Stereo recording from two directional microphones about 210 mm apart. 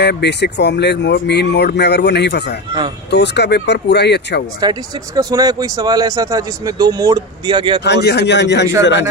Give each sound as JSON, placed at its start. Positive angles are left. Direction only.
{"t": 0.0, "sound": "speech", "side_deg": 55}
{"t": 4.6, "sound": "speech", "side_deg": -20}
{"t": 7.9, "sound": "a man's voice", "side_deg": 55}